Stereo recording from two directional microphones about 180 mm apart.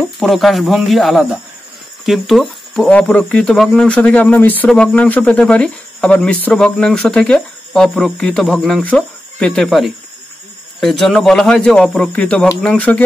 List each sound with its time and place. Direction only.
0.2 s speech: centre (ahead or behind)